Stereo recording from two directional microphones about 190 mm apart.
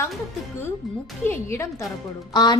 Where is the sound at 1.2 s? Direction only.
15° left (ahead or behind).